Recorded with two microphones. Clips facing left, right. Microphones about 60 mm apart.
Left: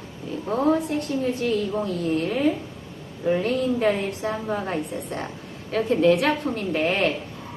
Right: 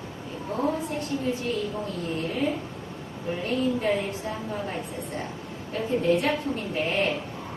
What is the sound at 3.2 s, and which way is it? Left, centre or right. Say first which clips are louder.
A woman's voice: left 5 dB; left.